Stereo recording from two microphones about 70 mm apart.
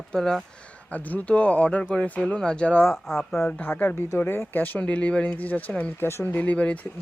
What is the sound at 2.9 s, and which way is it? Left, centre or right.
Speech, centre.